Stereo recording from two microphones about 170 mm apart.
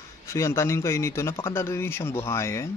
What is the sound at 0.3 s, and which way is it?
A man's voice, 15° left (ahead or behind).